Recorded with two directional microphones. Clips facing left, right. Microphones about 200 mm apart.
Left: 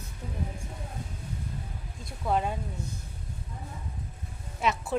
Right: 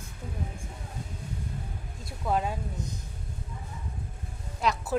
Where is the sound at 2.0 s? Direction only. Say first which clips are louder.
Even; centre (ahead or behind).